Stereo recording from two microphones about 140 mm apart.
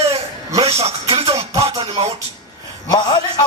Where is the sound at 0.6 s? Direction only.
45° right (ahead or behind).